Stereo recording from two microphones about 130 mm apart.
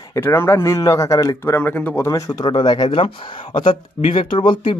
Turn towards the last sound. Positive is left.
turn(degrees=40)  # may be behind; listen again after turning